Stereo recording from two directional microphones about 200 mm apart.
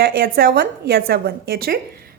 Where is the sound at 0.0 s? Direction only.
50° right (ahead or behind).